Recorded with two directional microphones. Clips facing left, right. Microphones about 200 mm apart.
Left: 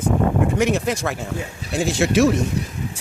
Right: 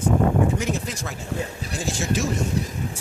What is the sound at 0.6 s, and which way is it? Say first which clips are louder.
Speech: left 8 dB; 75° left (ahead or behind).